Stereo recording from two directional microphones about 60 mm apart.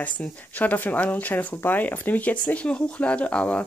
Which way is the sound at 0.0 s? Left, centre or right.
Left.